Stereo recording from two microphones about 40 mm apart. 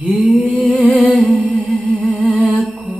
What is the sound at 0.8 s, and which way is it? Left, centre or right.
Music, right.